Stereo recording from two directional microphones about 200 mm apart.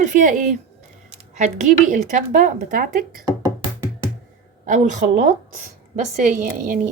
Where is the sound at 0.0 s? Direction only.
40° right (ahead or behind).